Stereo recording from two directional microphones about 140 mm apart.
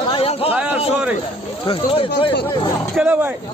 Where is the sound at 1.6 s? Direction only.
40° left (ahead or behind).